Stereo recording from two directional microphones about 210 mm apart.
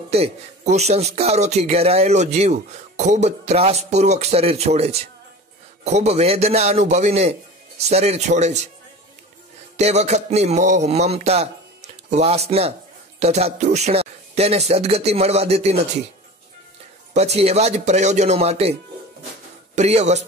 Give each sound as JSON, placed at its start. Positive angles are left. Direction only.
{"t": 0.1, "sound": "a man's voice", "side_deg": -30}
{"t": 9.8, "sound": "a man's voice", "side_deg": -30}
{"t": 17.1, "sound": "a man's voice", "side_deg": -30}